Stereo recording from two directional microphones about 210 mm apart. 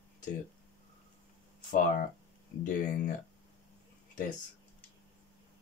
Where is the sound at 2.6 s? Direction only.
35° left (ahead or behind).